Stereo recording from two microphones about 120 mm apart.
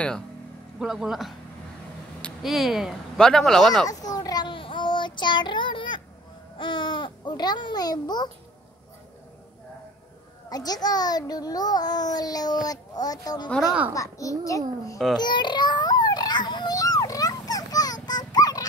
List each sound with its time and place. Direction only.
0.7 s speech: 5° right (ahead or behind)
2.4 s speech: centre (ahead or behind)
3.9 s child singing: 30° left (ahead or behind)
6.6 s a child's voice: 40° left (ahead or behind)
10.5 s a child's voice: 30° left (ahead or behind)
13.5 s speech: centre (ahead or behind)
13.9 s a child's voice: 25° left (ahead or behind)
15.1 s a sound: 40° left (ahead or behind)